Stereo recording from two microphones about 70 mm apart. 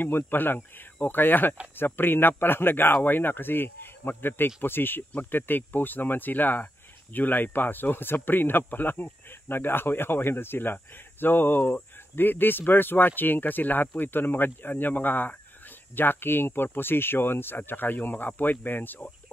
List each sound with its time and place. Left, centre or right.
0.0 s speech: left